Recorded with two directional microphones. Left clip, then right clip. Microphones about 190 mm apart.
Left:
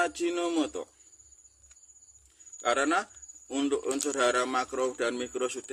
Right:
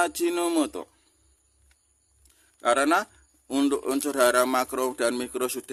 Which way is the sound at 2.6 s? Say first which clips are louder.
Right 5 dB; 45° right (ahead or behind).